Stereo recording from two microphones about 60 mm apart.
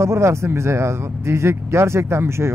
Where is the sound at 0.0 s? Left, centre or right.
Right.